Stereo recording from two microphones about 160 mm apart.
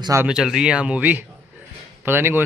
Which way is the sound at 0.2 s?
5° right (ahead or behind).